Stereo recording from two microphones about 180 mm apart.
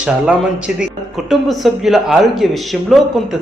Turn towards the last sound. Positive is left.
turn(degrees=0)  # may be behind; listen again after turning